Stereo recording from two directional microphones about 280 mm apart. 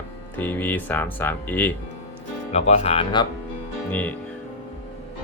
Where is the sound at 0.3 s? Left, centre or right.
Centre.